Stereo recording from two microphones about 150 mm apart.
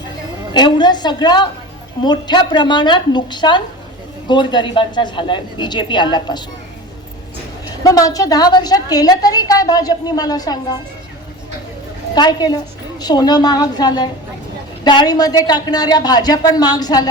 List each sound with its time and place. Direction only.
0.5 s a woman's voice: 30° left (ahead or behind)
7.9 s a woman's voice: 25° left (ahead or behind)
12.1 s a woman's voice: 25° left (ahead or behind)